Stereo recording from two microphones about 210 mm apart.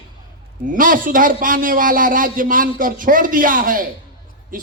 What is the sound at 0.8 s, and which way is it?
A man's voice, 40° right (ahead or behind).